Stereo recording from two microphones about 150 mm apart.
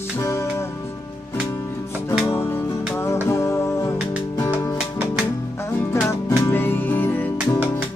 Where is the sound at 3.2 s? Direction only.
20° left (ahead or behind).